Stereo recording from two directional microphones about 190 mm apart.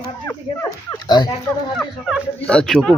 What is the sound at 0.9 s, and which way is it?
Dog, 20° left (ahead or behind).